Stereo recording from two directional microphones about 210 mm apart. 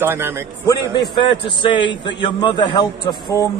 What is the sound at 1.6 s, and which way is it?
A man's voice, 20° left (ahead or behind).